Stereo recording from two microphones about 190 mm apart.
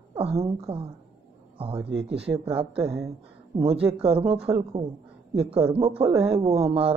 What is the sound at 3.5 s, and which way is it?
Speech, 30° right (ahead or behind).